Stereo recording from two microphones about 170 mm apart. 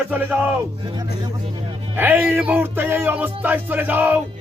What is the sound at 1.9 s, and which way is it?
Speech, 10° right (ahead or behind).